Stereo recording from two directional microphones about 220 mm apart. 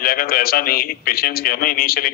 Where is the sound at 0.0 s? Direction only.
40° left (ahead or behind).